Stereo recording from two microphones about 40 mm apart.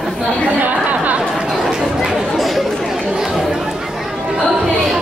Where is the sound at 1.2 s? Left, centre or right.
Centre.